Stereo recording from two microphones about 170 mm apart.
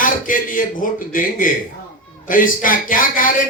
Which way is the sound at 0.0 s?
55° left (ahead or behind).